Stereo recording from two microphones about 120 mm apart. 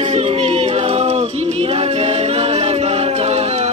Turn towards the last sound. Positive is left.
turn(degrees=-65)  # may be behind; listen again after turning